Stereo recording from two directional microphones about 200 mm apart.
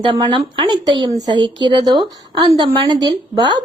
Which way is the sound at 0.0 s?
20° right (ahead or behind).